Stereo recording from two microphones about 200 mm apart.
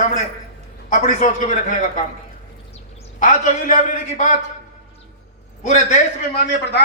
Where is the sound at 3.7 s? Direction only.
35° left (ahead or behind).